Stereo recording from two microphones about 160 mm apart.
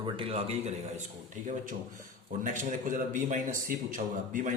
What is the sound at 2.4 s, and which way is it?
A man's voice, 55° right (ahead or behind).